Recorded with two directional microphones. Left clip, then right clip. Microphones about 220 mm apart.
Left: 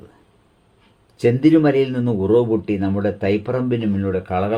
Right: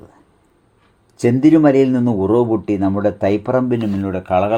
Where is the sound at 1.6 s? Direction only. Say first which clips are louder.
Right 4 dB; 15° right (ahead or behind).